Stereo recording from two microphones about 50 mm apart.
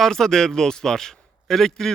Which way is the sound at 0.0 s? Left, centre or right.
Centre.